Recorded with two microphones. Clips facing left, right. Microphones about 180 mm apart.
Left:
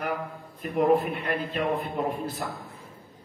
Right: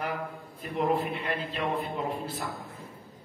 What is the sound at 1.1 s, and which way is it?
Speech, 55° left (ahead or behind).